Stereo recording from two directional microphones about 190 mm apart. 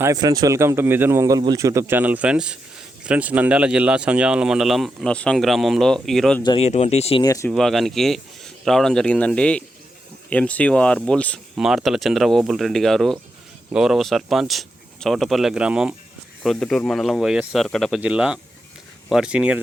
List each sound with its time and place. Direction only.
0.0 s speech: 20° right (ahead or behind); by 6.4 s centre (ahead or behind)
6.4 s speech: 30° left (ahead or behind)
7.2 s speech: 15° left (ahead or behind)
7.5 s speech: centre (ahead or behind)